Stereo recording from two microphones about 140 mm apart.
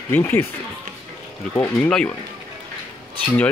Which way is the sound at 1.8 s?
5° left (ahead or behind).